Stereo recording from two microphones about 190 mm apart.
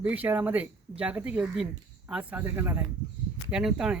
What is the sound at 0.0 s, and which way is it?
Speech, 10° right (ahead or behind).